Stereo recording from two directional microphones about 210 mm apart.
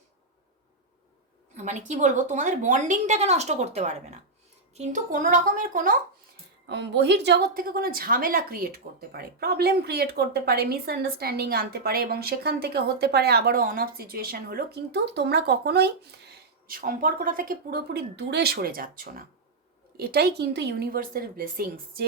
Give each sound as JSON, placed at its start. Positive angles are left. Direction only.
{"t": 1.5, "sound": "a woman's voice", "side_deg": -35}
{"t": 6.7, "sound": "a woman's voice", "side_deg": -55}